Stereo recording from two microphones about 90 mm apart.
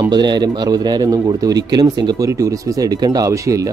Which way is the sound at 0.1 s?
55° right (ahead or behind).